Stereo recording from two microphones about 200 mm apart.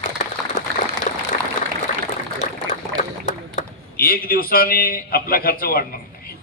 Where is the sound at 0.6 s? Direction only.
35° left (ahead or behind).